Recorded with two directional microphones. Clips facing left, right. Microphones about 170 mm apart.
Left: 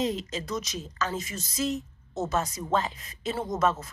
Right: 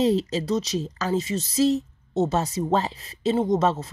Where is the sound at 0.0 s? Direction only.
35° right (ahead or behind).